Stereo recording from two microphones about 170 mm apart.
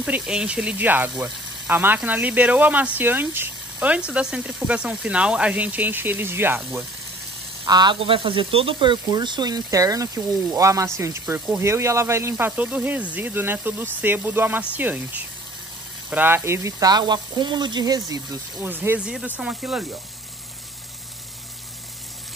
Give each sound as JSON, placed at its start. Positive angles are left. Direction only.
{"t": 0.0, "sound": "speech", "side_deg": -5}
{"t": 7.6, "sound": "speech", "side_deg": -25}